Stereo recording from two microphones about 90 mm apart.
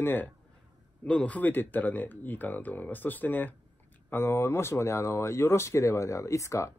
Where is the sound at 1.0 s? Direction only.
10° left (ahead or behind); by 6.7 s 35° left (ahead or behind).